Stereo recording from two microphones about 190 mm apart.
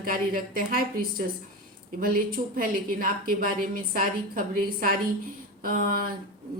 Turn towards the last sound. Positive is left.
turn(degrees=-50)  # may be behind; listen again after turning